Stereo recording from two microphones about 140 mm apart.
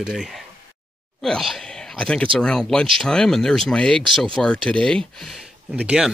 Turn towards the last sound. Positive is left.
turn(degrees=-5)  # may be behind; listen again after turning